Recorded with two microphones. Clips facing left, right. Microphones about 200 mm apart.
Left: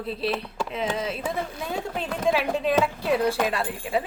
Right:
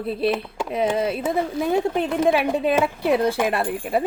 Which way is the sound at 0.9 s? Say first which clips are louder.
Right 7 dB; 55° right (ahead or behind).